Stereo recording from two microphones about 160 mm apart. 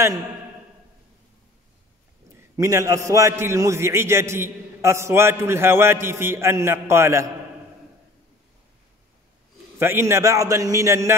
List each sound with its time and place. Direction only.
2.5 s a man's voice: 20° right (ahead or behind)
9.8 s a man's voice: 15° right (ahead or behind)